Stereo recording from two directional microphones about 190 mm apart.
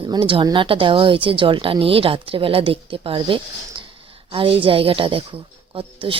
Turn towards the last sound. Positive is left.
turn(degrees=-30)  # may be behind; listen again after turning